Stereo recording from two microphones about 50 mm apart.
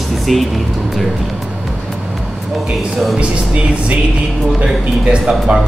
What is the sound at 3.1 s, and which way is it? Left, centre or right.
Speech, right.